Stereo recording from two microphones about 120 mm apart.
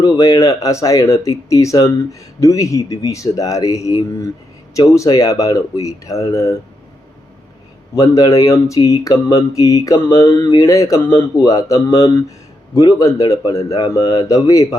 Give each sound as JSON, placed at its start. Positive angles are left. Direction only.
{"t": 0.0, "sound": "speech", "side_deg": 30}
{"t": 7.9, "sound": "speech", "side_deg": 30}